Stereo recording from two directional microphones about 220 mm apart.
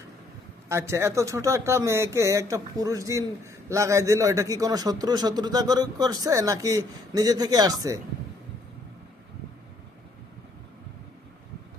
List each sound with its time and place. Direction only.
0.7 s speech: 10° right (ahead or behind)